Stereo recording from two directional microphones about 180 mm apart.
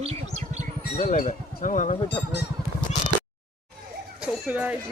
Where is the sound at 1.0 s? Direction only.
45° left (ahead or behind).